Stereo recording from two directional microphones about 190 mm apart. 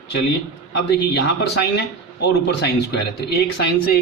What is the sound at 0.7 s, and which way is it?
Speech, 60° left (ahead or behind).